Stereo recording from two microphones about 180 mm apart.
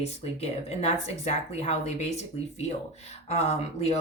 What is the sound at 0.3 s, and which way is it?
Speech, 35° left (ahead or behind).